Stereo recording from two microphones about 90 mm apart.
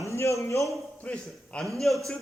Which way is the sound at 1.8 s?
Centre (ahead or behind).